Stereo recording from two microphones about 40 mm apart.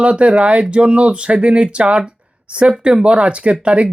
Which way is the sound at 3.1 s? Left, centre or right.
Right.